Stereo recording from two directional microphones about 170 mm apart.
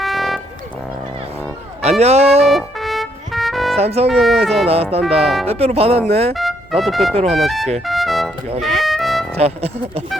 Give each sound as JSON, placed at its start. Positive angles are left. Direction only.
{"t": 0.0, "sound": "music", "side_deg": 0}
{"t": 1.8, "sound": "speech", "side_deg": -40}
{"t": 2.4, "sound": "music", "side_deg": 0}
{"t": 3.8, "sound": "speech", "side_deg": -40}
{"t": 4.1, "sound": "speech", "side_deg": 0}
{"t": 4.6, "sound": "speech", "side_deg": -35}
{"t": 6.3, "sound": "speech", "side_deg": 0}
{"t": 7.1, "sound": "speech", "side_deg": -35}
{"t": 7.3, "sound": "speech", "side_deg": 0}
{"t": 7.9, "sound": "music", "side_deg": 0}
{"t": 9.4, "sound": "speech", "side_deg": -40}